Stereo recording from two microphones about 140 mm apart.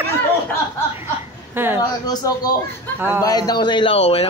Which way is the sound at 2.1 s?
30° left (ahead or behind).